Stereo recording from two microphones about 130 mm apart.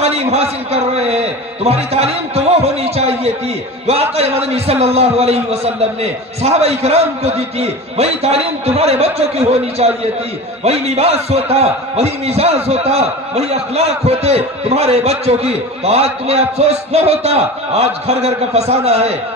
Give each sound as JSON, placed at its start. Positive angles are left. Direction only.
{"t": 0.0, "sound": "a man's voice", "side_deg": -50}